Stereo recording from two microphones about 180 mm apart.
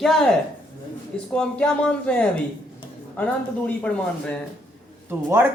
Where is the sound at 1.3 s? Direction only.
5° left (ahead or behind).